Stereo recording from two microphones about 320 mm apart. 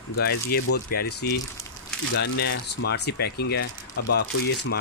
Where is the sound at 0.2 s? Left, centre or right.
Left.